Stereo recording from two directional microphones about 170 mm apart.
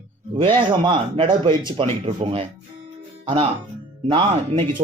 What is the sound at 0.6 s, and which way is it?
Speech, 30° right (ahead or behind).